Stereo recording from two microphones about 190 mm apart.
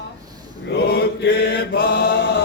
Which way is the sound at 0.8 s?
55° left (ahead or behind).